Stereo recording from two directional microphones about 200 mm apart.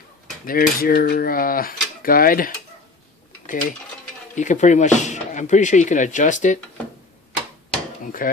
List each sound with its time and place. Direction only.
0.5 s speech: 45° left (ahead or behind)
4.4 s speech: 35° left (ahead or behind)
8.2 s speech: 45° left (ahead or behind)